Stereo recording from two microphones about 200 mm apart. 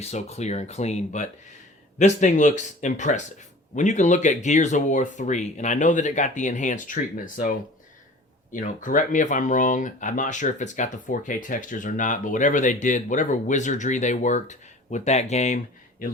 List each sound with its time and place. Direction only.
0.0 s speech: 30° left (ahead or behind)
8.5 s speech: 40° left (ahead or behind)